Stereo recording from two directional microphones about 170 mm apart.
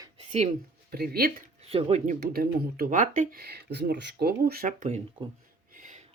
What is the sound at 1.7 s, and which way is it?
Speech, 40° right (ahead or behind).